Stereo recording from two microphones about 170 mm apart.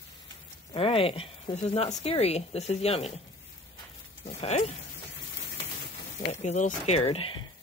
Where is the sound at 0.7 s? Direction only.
35° left (ahead or behind).